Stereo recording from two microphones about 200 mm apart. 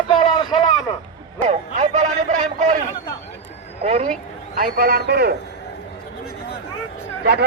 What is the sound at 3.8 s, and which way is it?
Speech, 35° right (ahead or behind).